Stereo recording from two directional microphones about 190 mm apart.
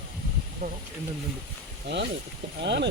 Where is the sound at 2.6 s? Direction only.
65° right (ahead or behind).